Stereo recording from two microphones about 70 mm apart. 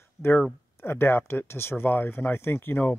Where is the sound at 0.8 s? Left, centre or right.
Left.